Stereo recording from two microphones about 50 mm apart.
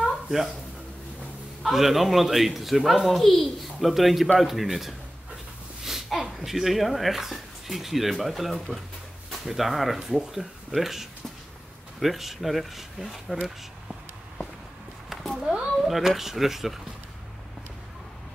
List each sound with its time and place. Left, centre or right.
0.0 s a sound: centre
1.6 s speech: centre
6.0 s speech: centre
15.5 s speech: centre